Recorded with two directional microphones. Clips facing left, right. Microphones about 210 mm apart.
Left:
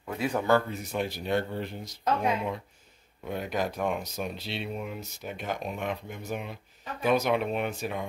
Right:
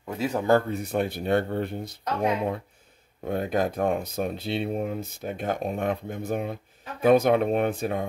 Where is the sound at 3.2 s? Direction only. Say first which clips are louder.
Right 5 dB; 50° right (ahead or behind).